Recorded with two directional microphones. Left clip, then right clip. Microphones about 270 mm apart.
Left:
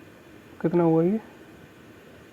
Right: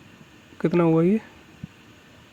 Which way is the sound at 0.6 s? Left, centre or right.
Right.